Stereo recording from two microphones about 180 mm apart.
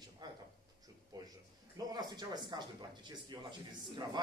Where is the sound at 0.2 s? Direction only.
20° right (ahead or behind).